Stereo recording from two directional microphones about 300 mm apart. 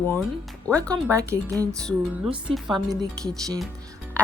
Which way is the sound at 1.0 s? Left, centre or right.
Centre.